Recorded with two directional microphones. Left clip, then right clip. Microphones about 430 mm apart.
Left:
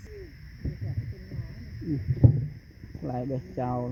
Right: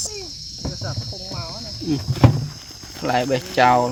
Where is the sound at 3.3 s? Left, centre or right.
Centre.